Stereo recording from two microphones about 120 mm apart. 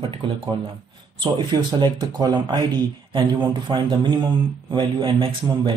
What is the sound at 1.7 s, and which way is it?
Speech, 40° right (ahead or behind).